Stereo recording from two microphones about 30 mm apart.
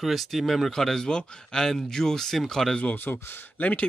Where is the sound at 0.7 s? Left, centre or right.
Centre.